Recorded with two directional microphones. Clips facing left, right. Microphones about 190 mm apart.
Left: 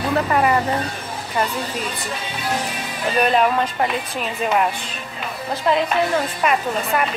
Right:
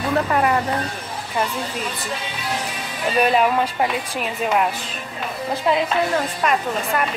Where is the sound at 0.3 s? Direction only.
5° left (ahead or behind).